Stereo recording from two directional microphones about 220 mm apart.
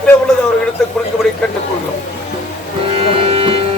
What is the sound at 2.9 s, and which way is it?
Music, 25° right (ahead or behind).